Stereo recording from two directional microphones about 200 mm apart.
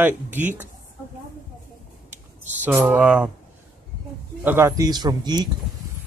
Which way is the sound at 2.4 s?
10° right (ahead or behind).